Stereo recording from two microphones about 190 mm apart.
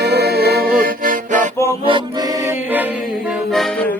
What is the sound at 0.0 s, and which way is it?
Music, 60° right (ahead or behind).